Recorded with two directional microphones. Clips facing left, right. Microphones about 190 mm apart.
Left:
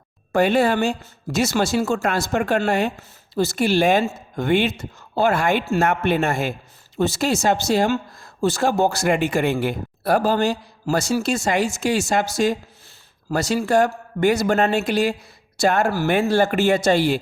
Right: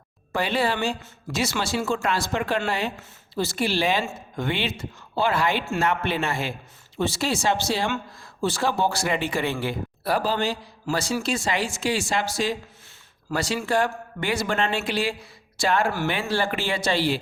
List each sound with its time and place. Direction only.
0.3 s speech: 45° left (ahead or behind)